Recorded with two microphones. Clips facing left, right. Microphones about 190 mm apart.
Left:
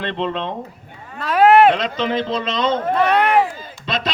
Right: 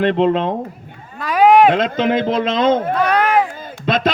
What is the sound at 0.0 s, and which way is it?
Speech, 45° right (ahead or behind).